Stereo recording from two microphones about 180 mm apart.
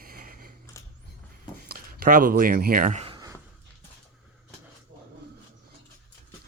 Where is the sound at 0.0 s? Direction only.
55° right (ahead or behind).